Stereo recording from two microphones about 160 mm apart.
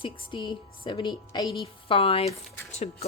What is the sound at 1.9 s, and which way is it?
Speech, 35° left (ahead or behind).